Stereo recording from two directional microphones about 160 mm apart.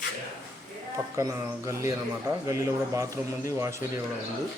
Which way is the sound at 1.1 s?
20° right (ahead or behind).